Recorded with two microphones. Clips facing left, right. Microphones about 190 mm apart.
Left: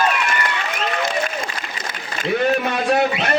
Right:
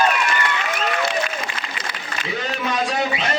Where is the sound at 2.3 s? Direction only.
60° left (ahead or behind).